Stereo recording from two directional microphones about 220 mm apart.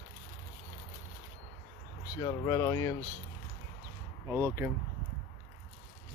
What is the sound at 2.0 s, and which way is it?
Speech, 20° left (ahead or behind).